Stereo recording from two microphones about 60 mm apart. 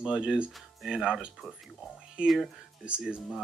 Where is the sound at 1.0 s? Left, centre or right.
Centre.